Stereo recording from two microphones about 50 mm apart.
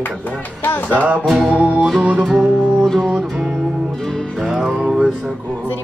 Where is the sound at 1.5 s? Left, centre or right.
Right.